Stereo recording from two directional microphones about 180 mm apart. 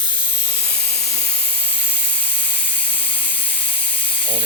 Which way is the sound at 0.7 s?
60° left (ahead or behind).